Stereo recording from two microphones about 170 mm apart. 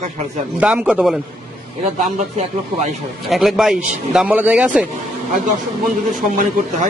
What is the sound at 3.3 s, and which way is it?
A man's voice, centre (ahead or behind).